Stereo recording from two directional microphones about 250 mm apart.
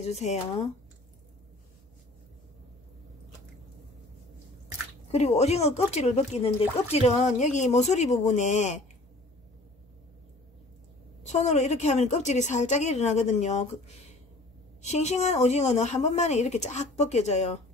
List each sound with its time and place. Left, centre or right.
0.0 s speech: left
5.1 s speech: left
11.2 s speech: left
14.8 s speech: left